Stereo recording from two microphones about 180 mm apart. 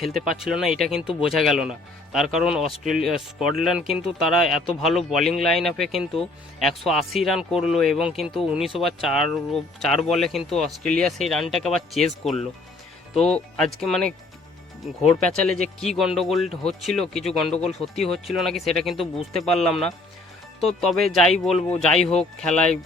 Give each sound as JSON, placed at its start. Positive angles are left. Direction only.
{"t": 0.0, "sound": "speech", "side_deg": 0}
{"t": 15.3, "sound": "speech", "side_deg": 5}
{"t": 17.5, "sound": "speech", "side_deg": 35}
{"t": 18.1, "sound": "speech", "side_deg": 0}